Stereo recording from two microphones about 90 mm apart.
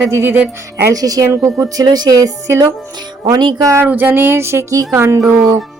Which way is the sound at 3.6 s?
35° right (ahead or behind).